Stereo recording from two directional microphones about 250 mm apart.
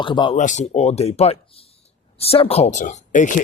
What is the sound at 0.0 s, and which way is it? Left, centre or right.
Speech, centre.